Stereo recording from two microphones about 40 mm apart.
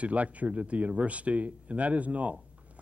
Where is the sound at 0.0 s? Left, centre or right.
Right.